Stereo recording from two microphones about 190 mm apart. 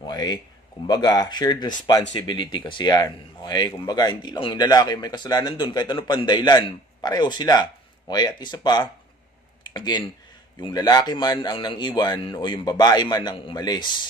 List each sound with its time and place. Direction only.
0.0 s speech: 20° left (ahead or behind)